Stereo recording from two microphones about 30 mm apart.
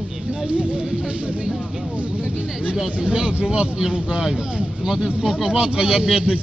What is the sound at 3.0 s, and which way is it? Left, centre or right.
Speech, right.